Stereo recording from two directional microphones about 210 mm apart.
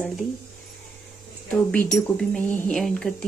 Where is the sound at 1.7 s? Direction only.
5° left (ahead or behind).